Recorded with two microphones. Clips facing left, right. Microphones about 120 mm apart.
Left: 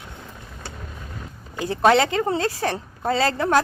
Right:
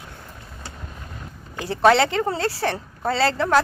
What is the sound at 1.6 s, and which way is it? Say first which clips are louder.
Speech: right 1 dB; 15° left (ahead or behind).